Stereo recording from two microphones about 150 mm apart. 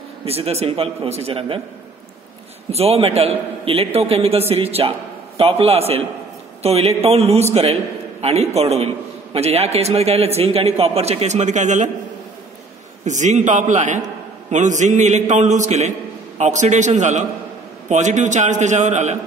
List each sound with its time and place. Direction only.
0.2 s a man's voice: 40° right (ahead or behind)
2.7 s a man's voice: 45° right (ahead or behind)
13.0 s a man's voice: 55° right (ahead or behind)